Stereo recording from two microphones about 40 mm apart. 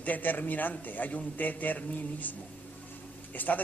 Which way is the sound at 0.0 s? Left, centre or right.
Left.